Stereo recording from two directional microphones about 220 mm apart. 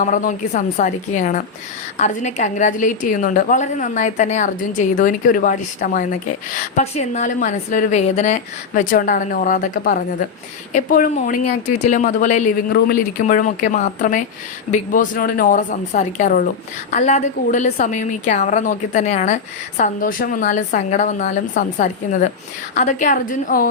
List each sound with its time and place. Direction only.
0.0 s a woman's voice: 35° left (ahead or behind)